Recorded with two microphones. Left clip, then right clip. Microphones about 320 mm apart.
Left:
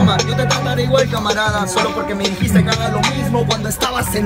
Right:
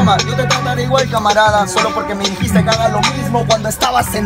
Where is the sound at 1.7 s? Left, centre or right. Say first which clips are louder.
Right 2 dB; centre.